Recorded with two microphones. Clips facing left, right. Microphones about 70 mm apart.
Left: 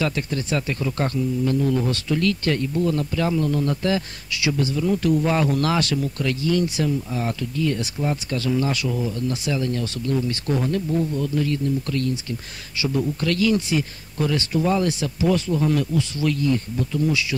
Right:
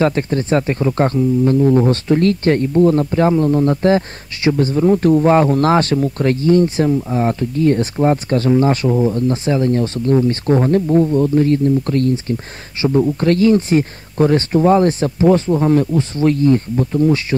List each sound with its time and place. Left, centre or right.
0.0 s speech: right